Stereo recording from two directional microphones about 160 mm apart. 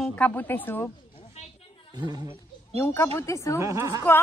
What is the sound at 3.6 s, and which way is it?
Speech, 20° right (ahead or behind).